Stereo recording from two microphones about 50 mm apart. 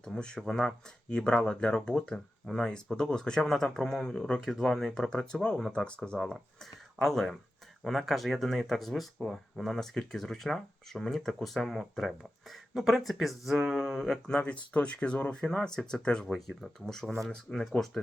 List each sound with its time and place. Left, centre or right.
0.0 s speech: centre
7.0 s speech: centre
14.4 s speech: left
16.2 s speech: centre
16.8 s speech: centre